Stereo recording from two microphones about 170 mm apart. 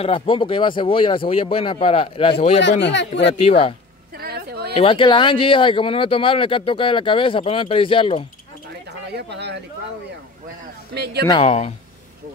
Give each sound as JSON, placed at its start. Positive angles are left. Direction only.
{"t": 0.0, "sound": "speech", "side_deg": 30}
{"t": 2.8, "sound": "speech", "side_deg": 90}
{"t": 3.3, "sound": "speech", "side_deg": 35}
{"t": 4.2, "sound": "a sound", "side_deg": -65}
{"t": 4.7, "sound": "speech", "side_deg": 30}
{"t": 9.0, "sound": "speech", "side_deg": -80}
{"t": 11.2, "sound": "speech", "side_deg": 35}